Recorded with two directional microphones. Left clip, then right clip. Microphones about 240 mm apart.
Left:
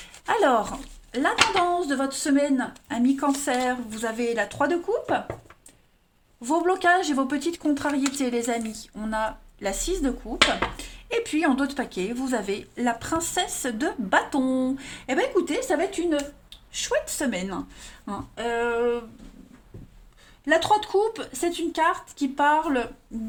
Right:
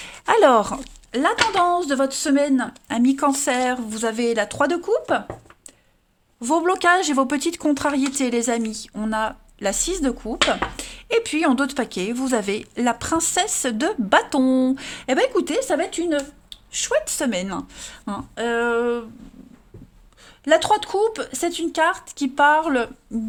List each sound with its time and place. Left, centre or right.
0.0 s a woman's voice: right
6.4 s a woman's voice: right
20.4 s a woman's voice: right